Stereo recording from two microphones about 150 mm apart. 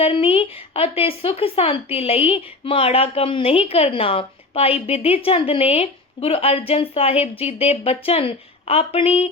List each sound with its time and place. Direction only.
0.0 s speech: 40° left (ahead or behind)